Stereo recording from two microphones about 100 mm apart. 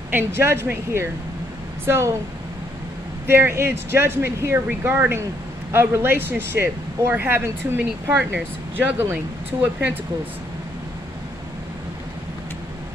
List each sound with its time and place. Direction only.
0.1 s speech: 25° right (ahead or behind)
3.3 s speech: 25° right (ahead or behind)